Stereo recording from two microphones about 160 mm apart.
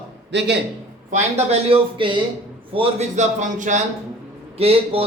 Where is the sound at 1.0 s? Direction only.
45° right (ahead or behind).